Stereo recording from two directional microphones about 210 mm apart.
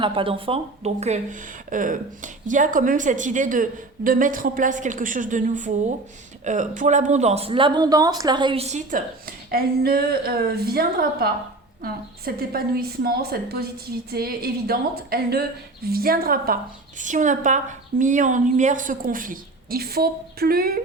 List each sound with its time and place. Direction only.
0.0 s a woman's voice: 25° right (ahead or behind); by 20.8 s 45° right (ahead or behind)